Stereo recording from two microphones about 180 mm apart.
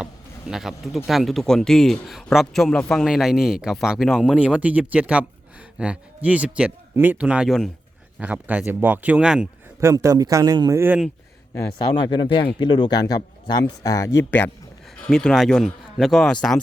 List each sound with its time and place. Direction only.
0.0 s speech: 5° right (ahead or behind)
9.8 s speech: 15° right (ahead or behind)
11.9 s speech: 25° left (ahead or behind); by 16.6 s 5° left (ahead or behind)